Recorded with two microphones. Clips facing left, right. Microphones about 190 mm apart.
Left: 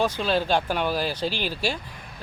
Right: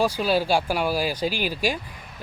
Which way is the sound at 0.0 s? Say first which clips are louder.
Right 2 dB; 10° right (ahead or behind).